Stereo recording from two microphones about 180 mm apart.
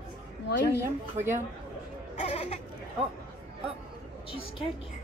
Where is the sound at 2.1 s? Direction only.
35° left (ahead or behind).